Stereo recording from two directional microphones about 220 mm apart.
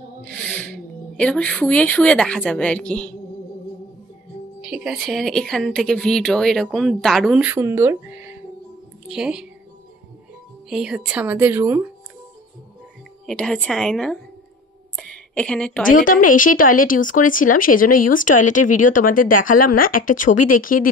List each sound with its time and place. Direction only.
0.7 s speech: 5° left (ahead or behind)
4.6 s speech: 5° right (ahead or behind)
10.7 s a woman's voice: 5° right (ahead or behind)
13.3 s a woman's voice: 5° left (ahead or behind)
15.9 s speech: 35° left (ahead or behind)